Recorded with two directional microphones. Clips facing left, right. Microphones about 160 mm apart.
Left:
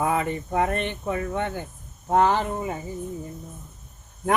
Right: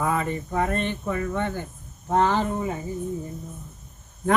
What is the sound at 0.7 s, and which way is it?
Speech, 15° left (ahead or behind).